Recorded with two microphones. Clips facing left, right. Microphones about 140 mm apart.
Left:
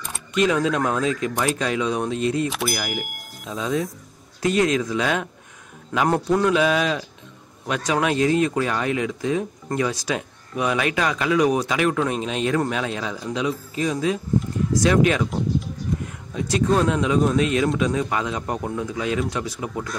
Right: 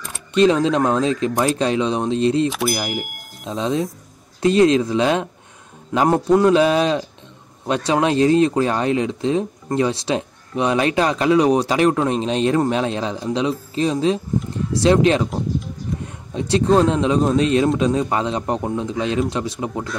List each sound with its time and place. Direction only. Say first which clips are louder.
0.3 s speech: right 5 dB; 25° right (ahead or behind)
2.5 s speech: right 4 dB; centre (ahead or behind)
3.4 s speech: right 3 dB; 25° right (ahead or behind)
16.3 s speech: right 4 dB; 30° right (ahead or behind)